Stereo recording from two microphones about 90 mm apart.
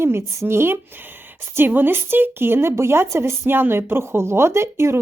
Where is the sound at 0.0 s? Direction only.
25° right (ahead or behind).